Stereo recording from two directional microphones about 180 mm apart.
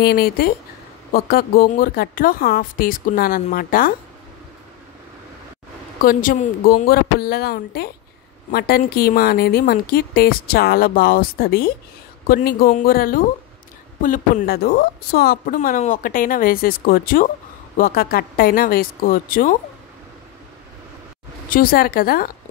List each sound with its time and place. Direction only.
0.0 s a woman's voice: 60° left (ahead or behind)
5.9 s a woman's voice: 50° left (ahead or behind)
21.5 s a woman's voice: 55° left (ahead or behind)